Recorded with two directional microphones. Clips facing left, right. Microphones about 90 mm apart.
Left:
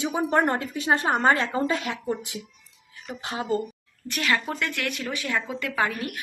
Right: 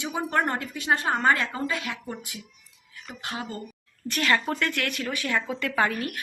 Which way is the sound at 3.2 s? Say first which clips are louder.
Left 6 dB; 25° left (ahead or behind).